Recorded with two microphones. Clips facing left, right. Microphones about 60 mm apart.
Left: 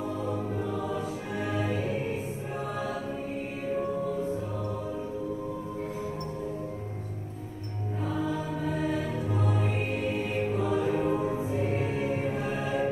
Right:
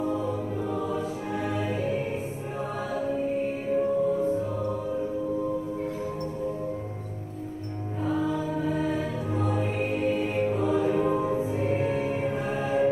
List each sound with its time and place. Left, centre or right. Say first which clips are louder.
9.5 s music: right 3 dB; right